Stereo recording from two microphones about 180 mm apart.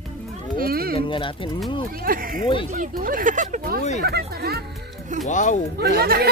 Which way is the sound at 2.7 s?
50° right (ahead or behind).